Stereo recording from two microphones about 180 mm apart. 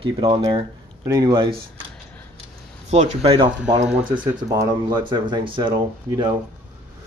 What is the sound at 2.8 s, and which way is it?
Speech, 40° right (ahead or behind).